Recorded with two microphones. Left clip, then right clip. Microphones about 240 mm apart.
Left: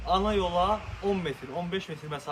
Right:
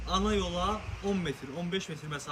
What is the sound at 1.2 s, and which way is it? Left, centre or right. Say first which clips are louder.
Speech: left 4 dB; centre.